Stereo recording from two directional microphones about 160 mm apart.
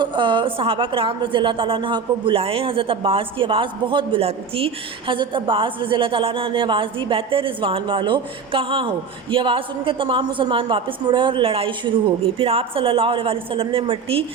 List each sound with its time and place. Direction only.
0.0 s a woman's voice: 30° right (ahead or behind)